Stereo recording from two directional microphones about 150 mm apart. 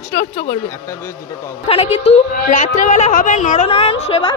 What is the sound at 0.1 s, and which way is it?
Speech, 80° left.